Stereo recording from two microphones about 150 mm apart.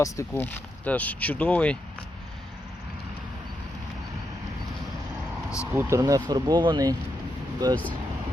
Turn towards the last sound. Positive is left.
turn(degrees=-30)  # may be behind; listen again after turning